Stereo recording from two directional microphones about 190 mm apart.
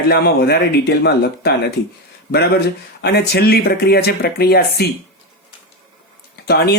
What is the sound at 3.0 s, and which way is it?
Speech, 60° left (ahead or behind).